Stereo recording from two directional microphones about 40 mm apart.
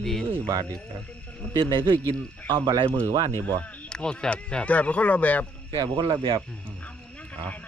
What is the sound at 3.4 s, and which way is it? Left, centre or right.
Speech, left.